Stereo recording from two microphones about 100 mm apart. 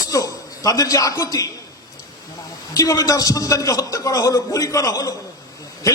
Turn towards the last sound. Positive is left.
turn(degrees=35)  # may be behind; listen again after turning